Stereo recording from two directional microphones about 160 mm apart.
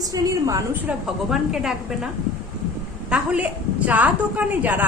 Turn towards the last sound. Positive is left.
turn(degrees=-10)  # may be behind; listen again after turning